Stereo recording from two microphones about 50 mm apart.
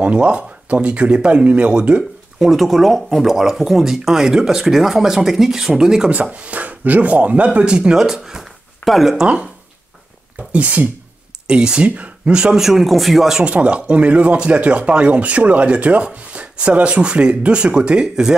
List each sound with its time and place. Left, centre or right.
0.0 s speech: right
2.5 s speech: centre
6.3 s speech: right
8.0 s speech: centre
10.5 s speech: right
11.4 s speech: centre
12.5 s speech: centre
13.4 s speech: right